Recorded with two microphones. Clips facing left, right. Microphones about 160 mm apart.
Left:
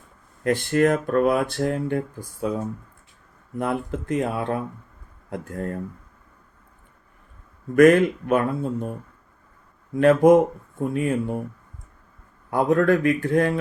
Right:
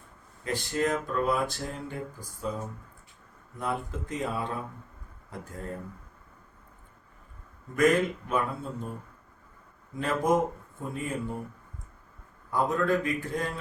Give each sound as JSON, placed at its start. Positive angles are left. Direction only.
{"t": 0.4, "sound": "speech", "side_deg": 65}
{"t": 7.8, "sound": "speech", "side_deg": 65}
{"t": 10.0, "sound": "speech", "side_deg": 65}
{"t": 12.5, "sound": "speech", "side_deg": 65}